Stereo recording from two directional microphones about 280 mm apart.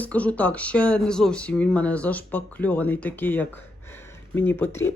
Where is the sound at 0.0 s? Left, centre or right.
Centre.